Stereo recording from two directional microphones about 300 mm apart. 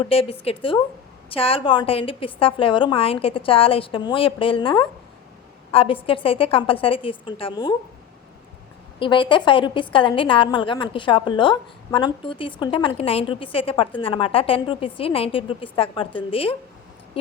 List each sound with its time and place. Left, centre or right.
0.0 s a woman's voice: centre
9.0 s a woman's voice: centre